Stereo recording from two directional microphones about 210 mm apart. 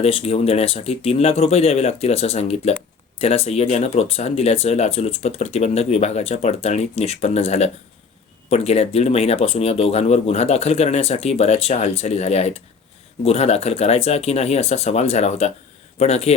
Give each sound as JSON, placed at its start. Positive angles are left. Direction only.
{"t": 0.0, "sound": "speech", "side_deg": 25}